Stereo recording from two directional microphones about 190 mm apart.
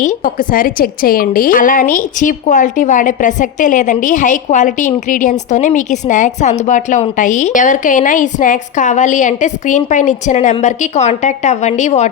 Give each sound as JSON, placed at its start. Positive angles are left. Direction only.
{"t": 0.0, "sound": "a woman's voice", "side_deg": 45}